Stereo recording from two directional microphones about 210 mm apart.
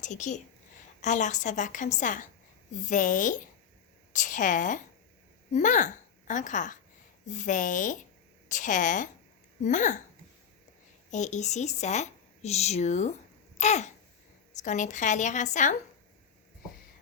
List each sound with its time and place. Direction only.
0.0 s a woman's voice: 35° left (ahead or behind)
11.1 s speech: 35° left (ahead or behind)